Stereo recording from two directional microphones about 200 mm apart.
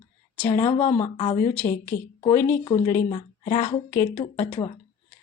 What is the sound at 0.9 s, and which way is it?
Speech, 20° left (ahead or behind).